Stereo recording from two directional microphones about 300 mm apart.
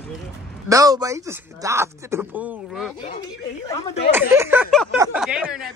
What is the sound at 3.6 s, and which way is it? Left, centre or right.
Speech, centre.